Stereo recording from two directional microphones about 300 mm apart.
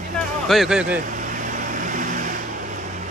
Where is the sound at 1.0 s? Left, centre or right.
Right.